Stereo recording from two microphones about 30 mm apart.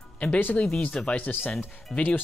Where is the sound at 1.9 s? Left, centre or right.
Left.